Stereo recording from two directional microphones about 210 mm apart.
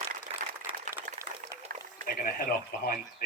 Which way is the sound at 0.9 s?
15° right (ahead or behind).